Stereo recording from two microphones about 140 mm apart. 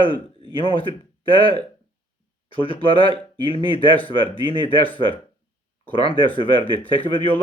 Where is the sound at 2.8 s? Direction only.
40° left (ahead or behind).